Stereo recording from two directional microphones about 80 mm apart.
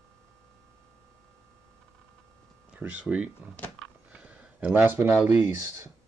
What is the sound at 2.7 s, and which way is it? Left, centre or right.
Speech, centre.